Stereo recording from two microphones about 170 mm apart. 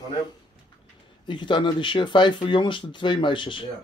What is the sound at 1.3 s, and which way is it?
Speech, 25° left (ahead or behind).